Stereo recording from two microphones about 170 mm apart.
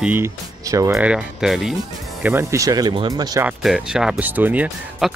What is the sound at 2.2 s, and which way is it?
Speech, 15° right (ahead or behind).